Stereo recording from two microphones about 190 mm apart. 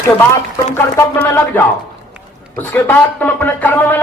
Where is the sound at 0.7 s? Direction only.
10° left (ahead or behind).